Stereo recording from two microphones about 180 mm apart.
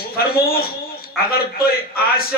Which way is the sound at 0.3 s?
55° left (ahead or behind).